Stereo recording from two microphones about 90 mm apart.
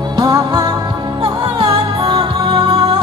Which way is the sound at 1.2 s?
60° right (ahead or behind).